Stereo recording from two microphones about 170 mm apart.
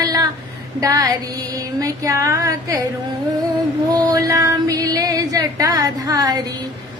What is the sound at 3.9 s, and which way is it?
Female singing, 20° right (ahead or behind).